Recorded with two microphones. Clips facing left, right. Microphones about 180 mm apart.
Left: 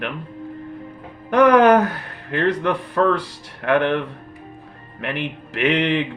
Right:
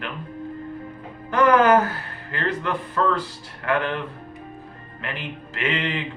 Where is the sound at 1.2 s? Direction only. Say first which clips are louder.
Left 4 dB; 70° left (ahead or behind).